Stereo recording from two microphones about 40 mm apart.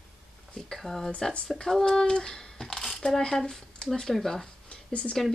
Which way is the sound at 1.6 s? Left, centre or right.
Centre.